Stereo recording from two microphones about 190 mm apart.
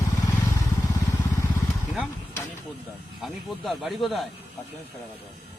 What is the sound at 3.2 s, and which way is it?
A man's voice, centre (ahead or behind).